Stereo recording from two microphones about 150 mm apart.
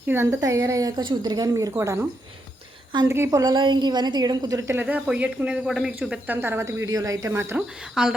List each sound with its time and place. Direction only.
0.1 s a woman's voice: 20° right (ahead or behind)
3.1 s a woman's voice: 20° right (ahead or behind)
8.0 s speech: 5° right (ahead or behind)